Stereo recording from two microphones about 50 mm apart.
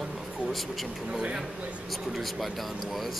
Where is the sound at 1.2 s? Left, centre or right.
Centre.